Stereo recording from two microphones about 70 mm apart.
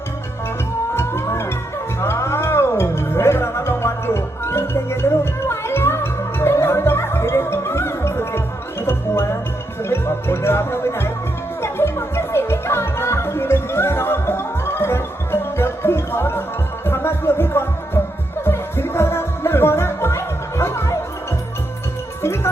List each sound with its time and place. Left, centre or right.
0.9 s music: left
9.9 s music: left